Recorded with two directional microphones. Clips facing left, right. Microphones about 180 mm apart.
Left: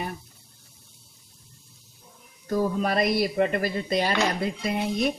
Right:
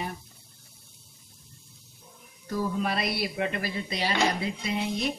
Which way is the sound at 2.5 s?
45° left (ahead or behind).